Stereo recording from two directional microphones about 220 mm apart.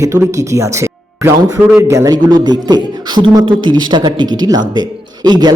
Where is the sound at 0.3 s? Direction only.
15° right (ahead or behind).